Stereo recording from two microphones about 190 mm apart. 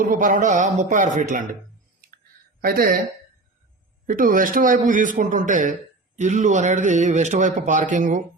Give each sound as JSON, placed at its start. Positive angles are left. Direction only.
{"t": 0.0, "sound": "a man's voice", "side_deg": -45}
{"t": 2.6, "sound": "a man's voice", "side_deg": -50}
{"t": 4.0, "sound": "a man's voice", "side_deg": -45}